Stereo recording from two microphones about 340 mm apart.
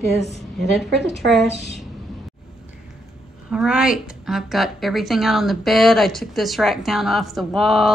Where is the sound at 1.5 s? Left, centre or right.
Left.